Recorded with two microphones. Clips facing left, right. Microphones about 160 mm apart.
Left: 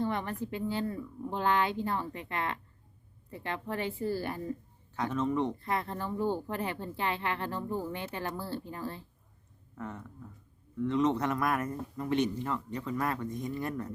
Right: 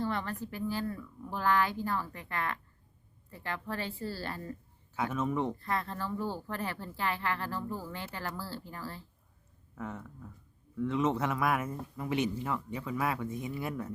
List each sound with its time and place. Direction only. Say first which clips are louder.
0.0 s speech: left 2 dB; 20° left (ahead or behind)
4.9 s a man's voice: left 2 dB; 5° right (ahead or behind)
5.5 s speech: left 1 dB; 20° left (ahead or behind)
9.7 s a man's voice: even; 5° right (ahead or behind)